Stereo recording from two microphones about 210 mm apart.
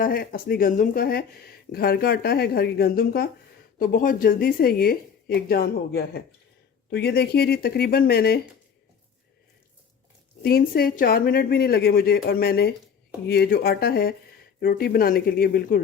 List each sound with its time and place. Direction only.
0.0 s speech: 45° left (ahead or behind)
10.4 s speech: 45° left (ahead or behind)